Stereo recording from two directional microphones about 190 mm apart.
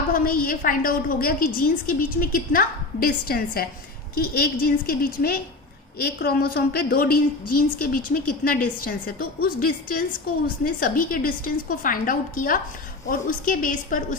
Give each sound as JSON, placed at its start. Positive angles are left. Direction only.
{"t": 0.1, "sound": "a woman's voice", "side_deg": 50}